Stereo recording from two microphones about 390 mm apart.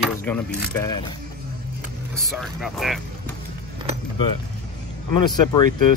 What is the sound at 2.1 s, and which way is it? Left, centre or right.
Speech, centre.